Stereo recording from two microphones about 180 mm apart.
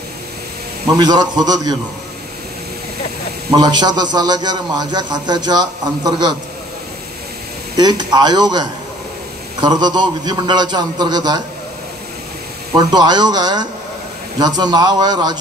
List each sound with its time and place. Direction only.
0.9 s a man's voice: 20° right (ahead or behind)
3.5 s a man's voice: 20° right (ahead or behind)
7.7 s a man's voice: 25° right (ahead or behind)
12.7 s a man's voice: 25° right (ahead or behind)